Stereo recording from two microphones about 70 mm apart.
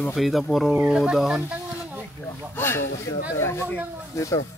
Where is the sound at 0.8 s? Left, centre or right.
Centre.